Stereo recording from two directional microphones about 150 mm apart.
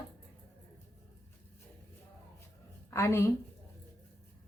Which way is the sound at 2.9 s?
20° left (ahead or behind).